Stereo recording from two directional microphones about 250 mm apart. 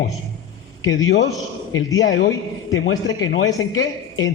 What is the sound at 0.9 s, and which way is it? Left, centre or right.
Speech, left.